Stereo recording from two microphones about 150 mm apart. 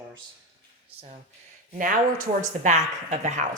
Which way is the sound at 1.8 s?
60° right (ahead or behind).